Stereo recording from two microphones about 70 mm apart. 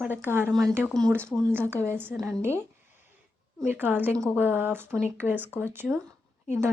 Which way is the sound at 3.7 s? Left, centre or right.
Right.